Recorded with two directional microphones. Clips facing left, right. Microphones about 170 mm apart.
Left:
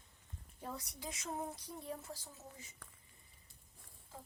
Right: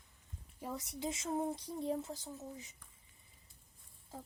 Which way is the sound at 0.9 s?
25° right (ahead or behind).